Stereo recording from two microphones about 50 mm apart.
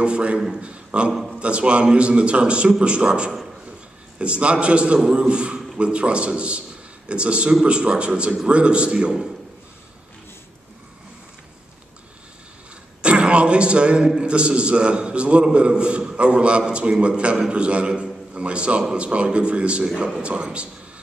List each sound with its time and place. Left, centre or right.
0.0 s a man's voice: right
13.0 s a man's voice: right